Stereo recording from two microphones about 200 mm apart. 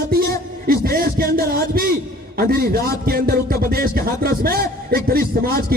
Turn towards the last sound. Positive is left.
turn(degrees=-45)  # may be behind; listen again after turning